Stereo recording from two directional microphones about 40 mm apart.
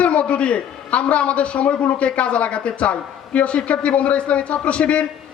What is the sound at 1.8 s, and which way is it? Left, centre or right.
Speech, left.